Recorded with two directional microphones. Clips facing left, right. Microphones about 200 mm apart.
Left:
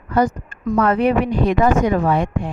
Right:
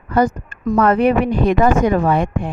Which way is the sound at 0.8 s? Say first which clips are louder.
Right 2 dB; 55° right (ahead or behind).